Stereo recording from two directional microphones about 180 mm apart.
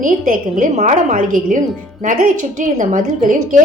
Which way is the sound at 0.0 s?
50° right (ahead or behind).